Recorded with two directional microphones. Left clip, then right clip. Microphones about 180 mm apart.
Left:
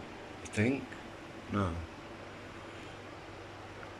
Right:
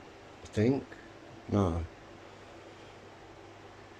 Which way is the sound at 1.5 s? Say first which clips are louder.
Right 5 dB; 40° right (ahead or behind).